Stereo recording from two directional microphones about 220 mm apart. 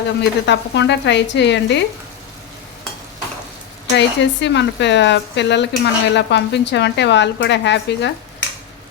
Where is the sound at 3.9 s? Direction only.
55° left (ahead or behind).